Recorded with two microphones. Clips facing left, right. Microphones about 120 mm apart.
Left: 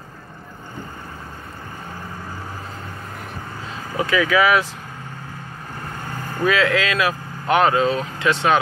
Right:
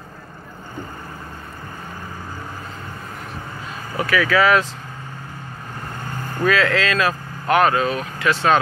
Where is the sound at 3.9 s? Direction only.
20° left (ahead or behind).